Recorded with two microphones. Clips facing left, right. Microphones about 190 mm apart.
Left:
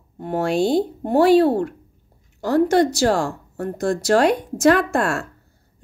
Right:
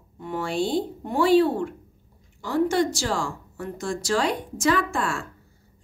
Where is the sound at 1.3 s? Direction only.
40° left (ahead or behind).